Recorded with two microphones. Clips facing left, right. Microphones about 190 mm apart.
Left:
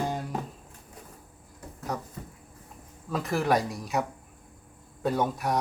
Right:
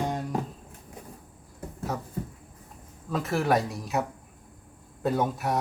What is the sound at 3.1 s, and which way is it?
Speech, centre (ahead or behind).